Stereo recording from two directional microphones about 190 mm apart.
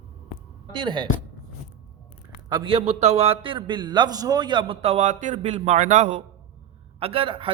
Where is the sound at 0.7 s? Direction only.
25° right (ahead or behind).